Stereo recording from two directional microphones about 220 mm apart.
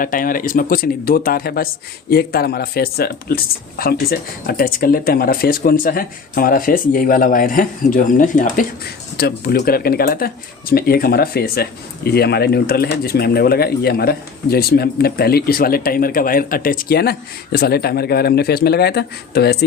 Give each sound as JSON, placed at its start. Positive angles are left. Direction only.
{"t": 0.0, "sound": "speech", "side_deg": 40}